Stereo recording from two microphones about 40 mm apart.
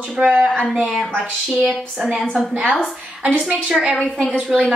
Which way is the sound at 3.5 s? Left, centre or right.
Right.